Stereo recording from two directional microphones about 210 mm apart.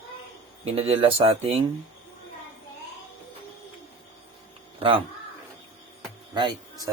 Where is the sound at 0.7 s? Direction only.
25° right (ahead or behind).